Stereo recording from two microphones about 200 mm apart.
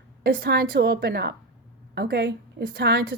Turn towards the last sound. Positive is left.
turn(degrees=-55)  # may be behind; listen again after turning